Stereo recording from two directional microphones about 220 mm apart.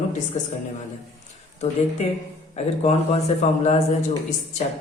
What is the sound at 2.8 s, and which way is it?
A man's voice, 30° left (ahead or behind).